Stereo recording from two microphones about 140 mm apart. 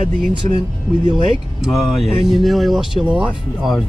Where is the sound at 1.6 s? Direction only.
Centre (ahead or behind).